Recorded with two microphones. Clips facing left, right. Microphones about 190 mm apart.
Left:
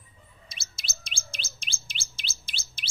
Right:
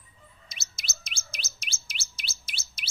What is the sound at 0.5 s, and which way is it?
Bird, 30° left (ahead or behind).